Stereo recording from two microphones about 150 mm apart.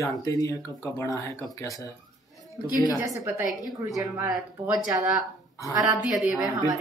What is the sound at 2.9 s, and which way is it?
Speech, 20° right (ahead or behind).